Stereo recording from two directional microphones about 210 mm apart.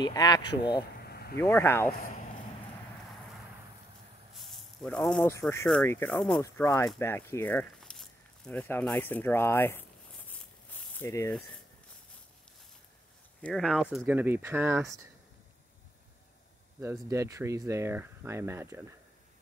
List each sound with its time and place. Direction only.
0.0 s speech: 20° left (ahead or behind)
1.0 s a sound: 50° left (ahead or behind)
1.4 s speech: 10° left (ahead or behind)
4.4 s speech: 5° left (ahead or behind)
13.4 s speech: centre (ahead or behind)
16.8 s speech: 15° right (ahead or behind)